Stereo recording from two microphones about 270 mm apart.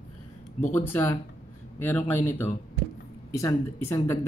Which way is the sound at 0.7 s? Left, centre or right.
Centre.